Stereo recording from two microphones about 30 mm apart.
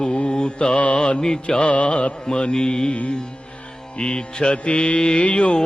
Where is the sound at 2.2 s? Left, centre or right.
Left.